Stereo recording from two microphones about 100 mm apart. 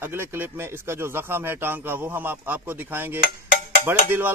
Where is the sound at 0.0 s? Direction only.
25° right (ahead or behind).